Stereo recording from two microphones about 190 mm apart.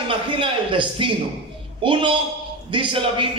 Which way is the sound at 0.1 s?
25° right (ahead or behind).